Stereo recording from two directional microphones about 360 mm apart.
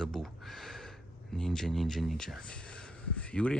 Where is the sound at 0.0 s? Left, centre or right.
Centre.